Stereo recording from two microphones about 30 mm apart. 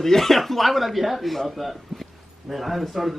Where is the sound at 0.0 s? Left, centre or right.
Centre.